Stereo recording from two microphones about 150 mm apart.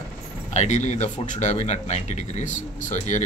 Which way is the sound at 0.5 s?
50° left (ahead or behind).